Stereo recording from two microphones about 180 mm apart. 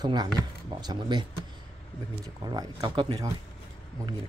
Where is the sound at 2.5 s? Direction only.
20° right (ahead or behind).